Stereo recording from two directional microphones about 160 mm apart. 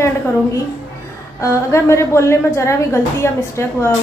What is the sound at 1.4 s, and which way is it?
A woman's voice, 20° left (ahead or behind).